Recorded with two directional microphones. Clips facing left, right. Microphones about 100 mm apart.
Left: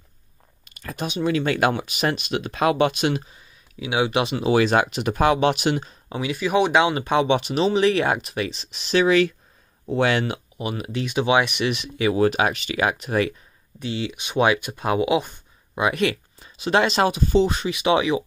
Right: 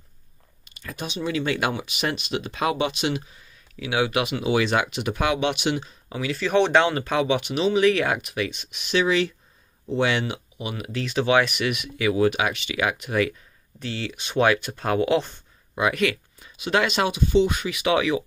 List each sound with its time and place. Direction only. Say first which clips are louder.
0.7 s speech: left 4 dB; 40° left (ahead or behind)
3.8 s speech: left 2 dB; 20° left (ahead or behind)
6.2 s speech: even; 10° left (ahead or behind); by 8.9 s 30° left (ahead or behind)
9.0 s speech: left 6 dB; 55° left (ahead or behind); by 10.9 s 35° left (ahead or behind)
10.9 s speech: even; 20° left (ahead or behind)
13.7 s speech: left 3 dB; 15° left (ahead or behind)
15.7 s speech: left 1 dB; 25° left (ahead or behind)